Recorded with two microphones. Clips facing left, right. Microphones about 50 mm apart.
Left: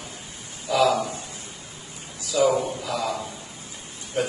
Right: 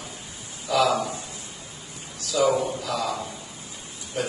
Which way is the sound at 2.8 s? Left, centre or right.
Left.